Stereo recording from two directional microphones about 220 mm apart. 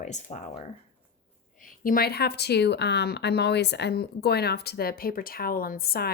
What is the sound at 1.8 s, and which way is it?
Speech, 40° left (ahead or behind).